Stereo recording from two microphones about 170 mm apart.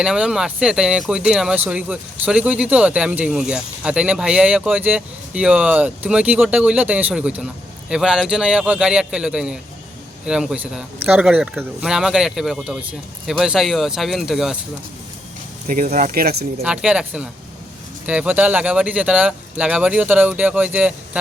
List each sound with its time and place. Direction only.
0.0 s speech: 5° right (ahead or behind)
15.6 s speech: 55° right (ahead or behind)
16.6 s speech: 5° right (ahead or behind)